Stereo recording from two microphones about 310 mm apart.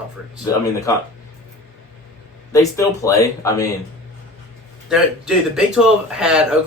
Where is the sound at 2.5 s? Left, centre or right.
Centre.